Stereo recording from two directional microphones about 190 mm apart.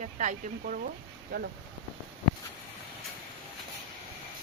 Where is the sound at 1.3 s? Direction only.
55° right (ahead or behind).